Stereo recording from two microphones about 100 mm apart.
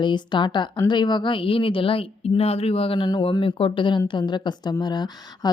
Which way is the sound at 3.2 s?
60° left (ahead or behind).